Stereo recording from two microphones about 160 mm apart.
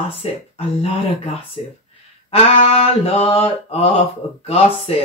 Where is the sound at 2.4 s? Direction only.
40° left (ahead or behind).